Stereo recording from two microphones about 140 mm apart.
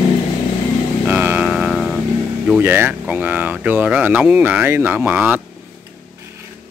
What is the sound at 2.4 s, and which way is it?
Speech, 15° right (ahead or behind).